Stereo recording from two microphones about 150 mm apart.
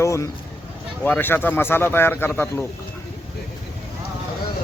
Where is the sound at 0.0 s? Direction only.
20° left (ahead or behind).